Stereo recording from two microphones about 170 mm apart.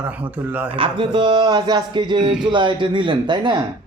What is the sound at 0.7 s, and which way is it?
Speech, 30° right (ahead or behind).